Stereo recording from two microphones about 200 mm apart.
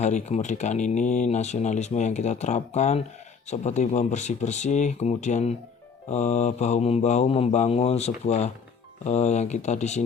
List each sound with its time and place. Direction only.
0.0 s speech: 35° left (ahead or behind)